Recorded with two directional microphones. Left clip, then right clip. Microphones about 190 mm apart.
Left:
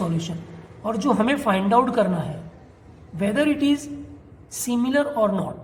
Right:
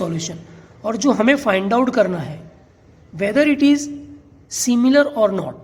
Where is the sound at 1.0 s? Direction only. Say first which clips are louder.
Right 6 dB; 45° right (ahead or behind).